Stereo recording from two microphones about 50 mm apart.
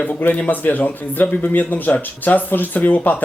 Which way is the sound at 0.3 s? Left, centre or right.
Left.